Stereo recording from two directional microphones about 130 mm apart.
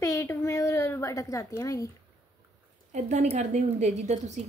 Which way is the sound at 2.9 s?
65° right (ahead or behind).